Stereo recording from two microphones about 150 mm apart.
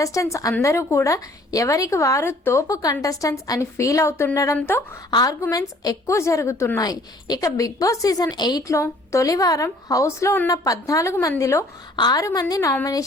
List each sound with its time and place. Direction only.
0.0 s a woman's voice: 20° left (ahead or behind)